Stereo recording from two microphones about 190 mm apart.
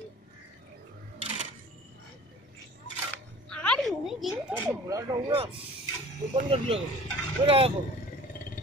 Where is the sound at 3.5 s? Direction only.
5° left (ahead or behind).